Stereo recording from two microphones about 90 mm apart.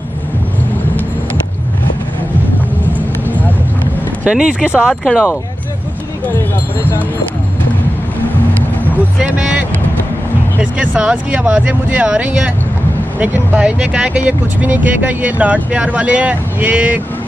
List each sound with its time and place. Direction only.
3.3 s a sound: 20° left (ahead or behind)
4.2 s speech: 10° right (ahead or behind)
9.4 s speech: 10° right (ahead or behind)